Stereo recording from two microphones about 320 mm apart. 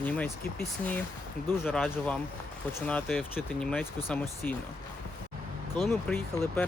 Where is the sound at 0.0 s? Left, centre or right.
Centre.